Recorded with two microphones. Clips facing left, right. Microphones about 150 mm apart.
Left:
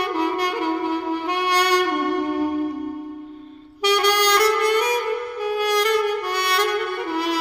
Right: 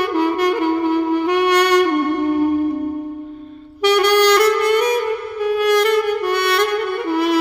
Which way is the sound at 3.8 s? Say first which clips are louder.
Right 6 dB; 35° left (ahead or behind).